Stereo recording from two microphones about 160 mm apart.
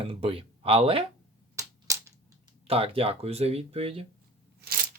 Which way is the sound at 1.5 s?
20° right (ahead or behind).